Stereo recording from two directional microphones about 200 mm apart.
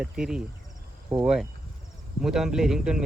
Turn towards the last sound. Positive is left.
turn(degrees=0)  # may be behind; listen again after turning